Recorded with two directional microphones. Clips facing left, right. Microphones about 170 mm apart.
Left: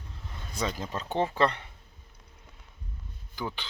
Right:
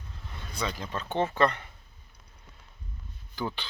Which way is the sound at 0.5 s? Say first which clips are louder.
Left 2 dB; 45° left (ahead or behind).